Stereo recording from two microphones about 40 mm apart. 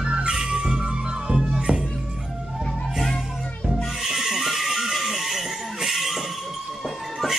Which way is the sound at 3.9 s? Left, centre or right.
Centre.